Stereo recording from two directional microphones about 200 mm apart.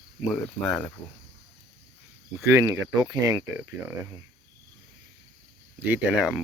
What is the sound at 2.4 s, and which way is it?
Speech, 15° right (ahead or behind).